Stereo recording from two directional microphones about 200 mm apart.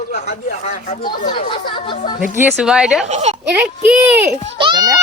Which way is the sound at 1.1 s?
50° left (ahead or behind).